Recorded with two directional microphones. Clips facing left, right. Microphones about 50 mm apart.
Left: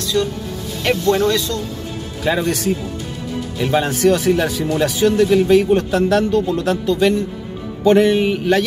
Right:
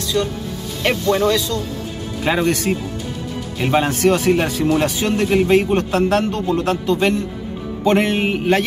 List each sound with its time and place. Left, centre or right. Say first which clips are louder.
0.1 s speech: left 1 dB; centre
2.2 s a man's voice: even; right
7.8 s music: left 4 dB; right